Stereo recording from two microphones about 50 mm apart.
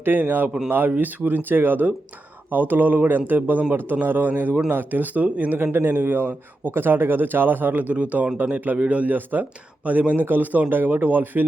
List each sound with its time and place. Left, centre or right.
0.0 s speech: right
5.7 s a man's voice: right
6.0 s speech: right
6.7 s speech: right
10.2 s speech: right